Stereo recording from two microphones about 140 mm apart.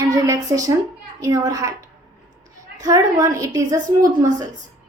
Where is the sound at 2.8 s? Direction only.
25° right (ahead or behind).